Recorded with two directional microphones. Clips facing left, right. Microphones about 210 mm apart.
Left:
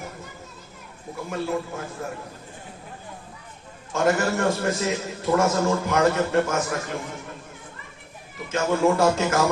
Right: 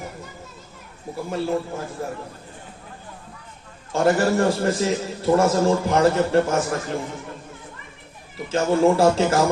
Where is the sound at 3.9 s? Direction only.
35° right (ahead or behind).